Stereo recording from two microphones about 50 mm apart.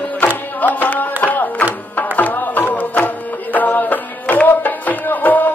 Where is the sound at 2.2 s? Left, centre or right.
Left.